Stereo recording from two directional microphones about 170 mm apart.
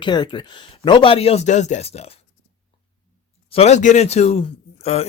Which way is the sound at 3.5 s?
40° left (ahead or behind).